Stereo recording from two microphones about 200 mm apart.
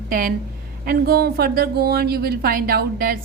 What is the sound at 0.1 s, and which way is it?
A woman's voice, 45° right (ahead or behind).